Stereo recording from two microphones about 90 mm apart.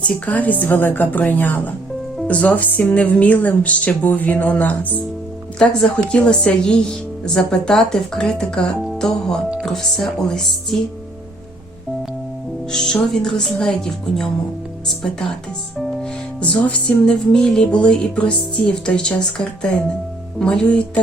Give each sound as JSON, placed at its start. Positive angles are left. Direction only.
{"t": 0.0, "sound": "music", "side_deg": 15}
{"t": 8.8, "sound": "speech", "side_deg": 5}
{"t": 12.7, "sound": "music", "side_deg": 5}
{"t": 16.4, "sound": "music", "side_deg": 15}